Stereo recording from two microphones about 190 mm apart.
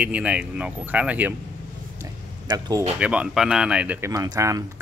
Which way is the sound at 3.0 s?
5° right (ahead or behind).